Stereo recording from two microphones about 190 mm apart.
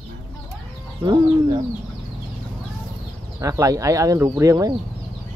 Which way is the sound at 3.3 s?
15° right (ahead or behind).